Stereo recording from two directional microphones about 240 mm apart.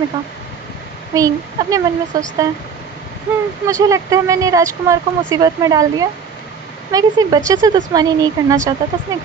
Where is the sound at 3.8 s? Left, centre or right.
Centre.